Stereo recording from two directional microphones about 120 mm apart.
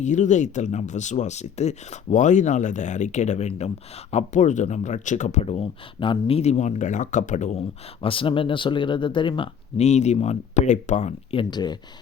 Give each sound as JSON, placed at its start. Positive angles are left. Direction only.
{"t": 0.0, "sound": "speech", "side_deg": 90}
{"t": 4.1, "sound": "speech", "side_deg": 80}
{"t": 8.0, "sound": "speech", "side_deg": 45}
{"t": 9.7, "sound": "speech", "side_deg": 65}
{"t": 11.3, "sound": "speech", "side_deg": 40}